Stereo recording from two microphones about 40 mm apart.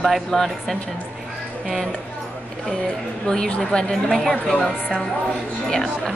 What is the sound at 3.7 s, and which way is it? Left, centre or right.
Speech, left.